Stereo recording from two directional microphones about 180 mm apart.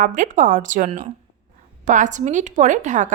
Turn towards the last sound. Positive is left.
turn(degrees=-45)  # may be behind; listen again after turning